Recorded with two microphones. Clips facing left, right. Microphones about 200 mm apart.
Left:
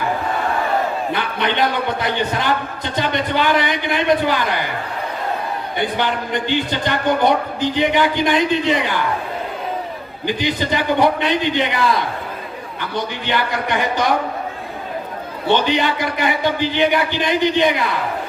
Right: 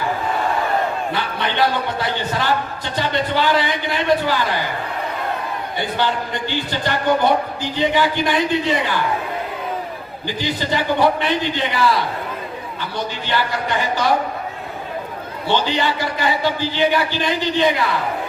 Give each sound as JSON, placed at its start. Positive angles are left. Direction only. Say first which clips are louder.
{"t": 1.5, "sound": "a man's voice", "louder": "right 2 dB", "side_deg": 20}
{"t": 5.7, "sound": "a man's voice", "louder": "left 1 dB", "side_deg": 20}
{"t": 10.2, "sound": "a man's voice", "louder": "left 3 dB", "side_deg": 20}
{"t": 15.5, "sound": "a man's voice", "louder": "left 2 dB", "side_deg": 20}